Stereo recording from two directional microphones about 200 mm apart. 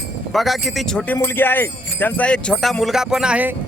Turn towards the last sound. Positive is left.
turn(degrees=-5)  # may be behind; listen again after turning